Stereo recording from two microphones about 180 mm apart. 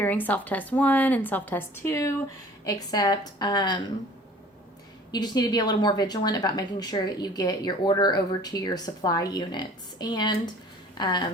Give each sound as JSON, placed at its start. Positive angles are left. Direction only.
{"t": 0.0, "sound": "a woman's voice", "side_deg": 10}
{"t": 5.1, "sound": "speech", "side_deg": 20}